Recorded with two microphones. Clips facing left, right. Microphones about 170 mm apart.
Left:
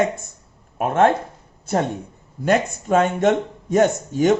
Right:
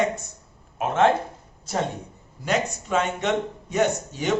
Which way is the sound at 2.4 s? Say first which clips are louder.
Left 6 dB; 50° left (ahead or behind).